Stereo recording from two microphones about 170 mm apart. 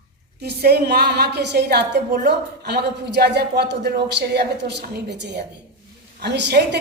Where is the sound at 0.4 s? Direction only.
70° right (ahead or behind).